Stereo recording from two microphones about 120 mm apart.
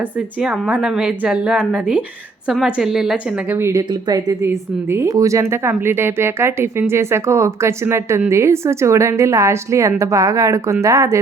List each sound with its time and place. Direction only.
0.0 s a woman's voice: 10° right (ahead or behind)
3.5 s speech: 25° right (ahead or behind)
4.4 s speech: 20° right (ahead or behind)